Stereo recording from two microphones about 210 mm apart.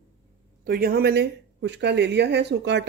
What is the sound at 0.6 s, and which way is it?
Speech, 45° right (ahead or behind).